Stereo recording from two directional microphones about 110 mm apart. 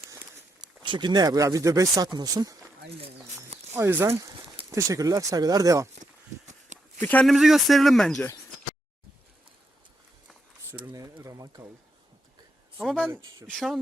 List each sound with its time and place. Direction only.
0.6 s speech: 40° right (ahead or behind)
3.7 s speech: 20° right (ahead or behind)
6.4 s a sound: 90° right
7.0 s speech: 15° left (ahead or behind)
7.3 s speech: centre (ahead or behind)
10.9 s speech: 30° right (ahead or behind)
12.8 s speech: centre (ahead or behind)